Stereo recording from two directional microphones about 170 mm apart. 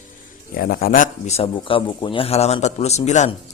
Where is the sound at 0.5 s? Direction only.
60° left (ahead or behind).